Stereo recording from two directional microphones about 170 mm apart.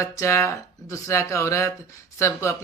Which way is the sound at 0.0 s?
15° left (ahead or behind).